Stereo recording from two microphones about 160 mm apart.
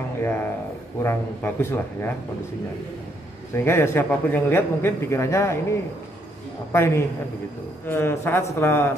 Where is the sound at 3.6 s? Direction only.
15° left (ahead or behind).